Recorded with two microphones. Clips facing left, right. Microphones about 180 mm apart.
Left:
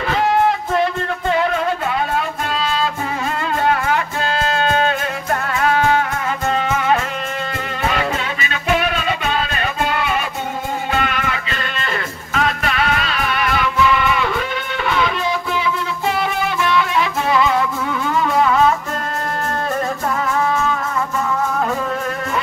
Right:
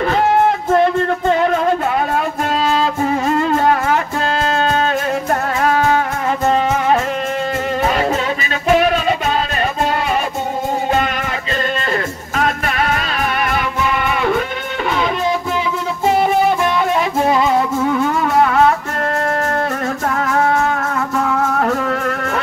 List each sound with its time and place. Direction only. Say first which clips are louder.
4.6 s music: right 1 dB; 40° right (ahead or behind)
11.0 s music: right 2 dB; 40° right (ahead or behind)
12.4 s music: right 1 dB; 45° right (ahead or behind)
16.2 s music: right 6 dB; 45° right (ahead or behind); by 18.8 s 60° right (ahead or behind)
20.2 s music: right 4 dB; 60° right (ahead or behind)